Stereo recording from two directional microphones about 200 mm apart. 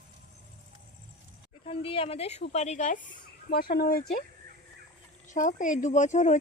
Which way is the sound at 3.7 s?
50° left (ahead or behind).